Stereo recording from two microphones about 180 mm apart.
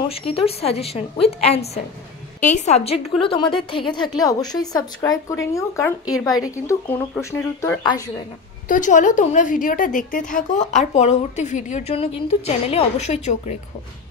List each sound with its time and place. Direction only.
0.1 s a woman's voice: 35° left (ahead or behind); by 7.8 s 15° left (ahead or behind)
8.6 s a woman's voice: 45° left (ahead or behind)